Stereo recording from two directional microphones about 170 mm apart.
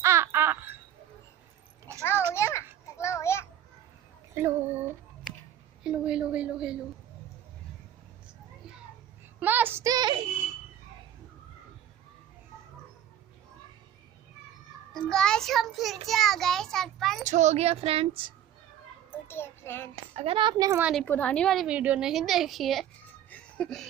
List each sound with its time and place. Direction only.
0.0 s a sound: 15° right (ahead or behind)
2.0 s a sound: 15° left (ahead or behind)
2.3 s children playing: 15° left (ahead or behind)
4.4 s child singing: 15° right (ahead or behind)
5.9 s a sound: 5° right (ahead or behind)
9.4 s child singing: 10° right (ahead or behind)
15.0 s a sound: 5° left (ahead or behind)
17.2 s speech: 45° right (ahead or behind)
19.2 s child singing: 15° left (ahead or behind)
20.2 s speech: 30° right (ahead or behind)
21.0 s a woman's voice: 10° left (ahead or behind)
23.3 s music: 5° left (ahead or behind)